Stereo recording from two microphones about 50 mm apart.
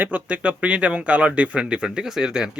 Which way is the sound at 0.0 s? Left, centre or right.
Right.